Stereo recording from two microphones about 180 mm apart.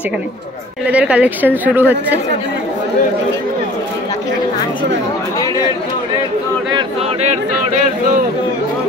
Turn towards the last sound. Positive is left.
turn(degrees=-40)  # may be behind; listen again after turning